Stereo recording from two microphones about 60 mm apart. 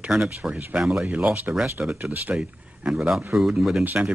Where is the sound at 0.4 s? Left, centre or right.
Right.